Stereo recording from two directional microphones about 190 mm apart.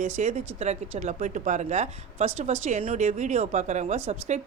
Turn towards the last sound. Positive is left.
turn(degrees=-35)  # may be behind; listen again after turning